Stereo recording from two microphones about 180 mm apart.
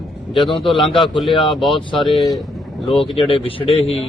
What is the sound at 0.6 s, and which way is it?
Speech, 30° left (ahead or behind).